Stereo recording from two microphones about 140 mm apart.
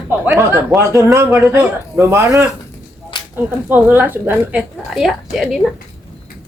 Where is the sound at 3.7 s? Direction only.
15° right (ahead or behind).